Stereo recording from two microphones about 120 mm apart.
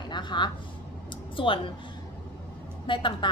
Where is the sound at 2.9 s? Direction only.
40° left (ahead or behind).